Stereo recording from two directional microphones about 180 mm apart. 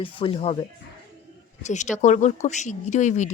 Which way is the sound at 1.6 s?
40° left (ahead or behind).